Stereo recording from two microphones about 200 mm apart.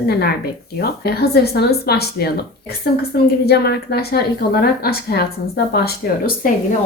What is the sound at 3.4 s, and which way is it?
Speech, 55° left (ahead or behind).